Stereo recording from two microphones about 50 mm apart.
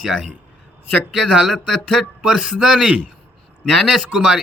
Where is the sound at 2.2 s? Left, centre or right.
Centre.